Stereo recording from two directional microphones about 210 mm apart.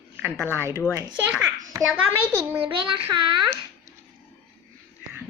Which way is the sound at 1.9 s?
10° right (ahead or behind).